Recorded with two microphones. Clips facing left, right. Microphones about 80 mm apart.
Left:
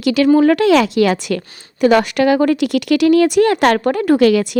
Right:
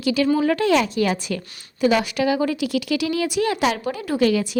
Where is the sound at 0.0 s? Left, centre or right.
Left.